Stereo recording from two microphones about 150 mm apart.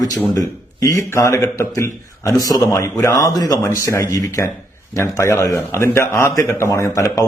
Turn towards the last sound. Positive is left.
turn(degrees=20)  # may be behind; listen again after turning